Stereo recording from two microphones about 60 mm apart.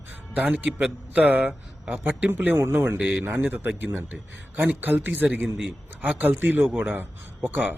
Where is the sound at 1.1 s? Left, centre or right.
Right.